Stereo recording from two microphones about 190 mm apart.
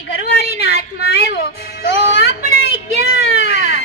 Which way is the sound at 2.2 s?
60° left (ahead or behind).